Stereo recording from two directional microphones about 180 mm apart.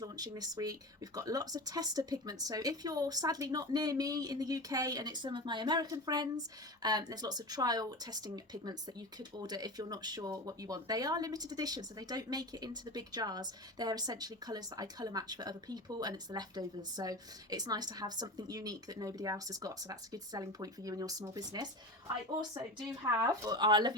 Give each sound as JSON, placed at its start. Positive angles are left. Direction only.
{"t": 0.0, "sound": "speech", "side_deg": -20}